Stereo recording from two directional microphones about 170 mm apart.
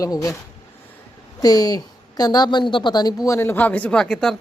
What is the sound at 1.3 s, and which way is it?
A woman's voice, 20° left (ahead or behind).